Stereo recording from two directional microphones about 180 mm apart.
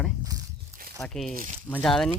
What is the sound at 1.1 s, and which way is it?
Speech, 5° left (ahead or behind).